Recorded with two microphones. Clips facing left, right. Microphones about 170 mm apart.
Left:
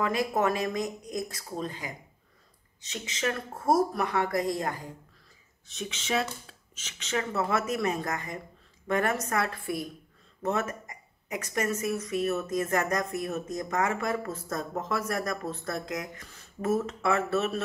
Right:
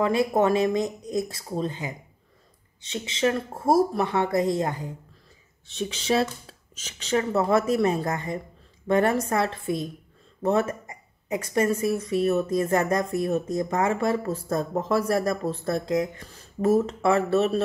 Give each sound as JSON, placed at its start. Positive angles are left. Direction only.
{"t": 0.0, "sound": "speech", "side_deg": -30}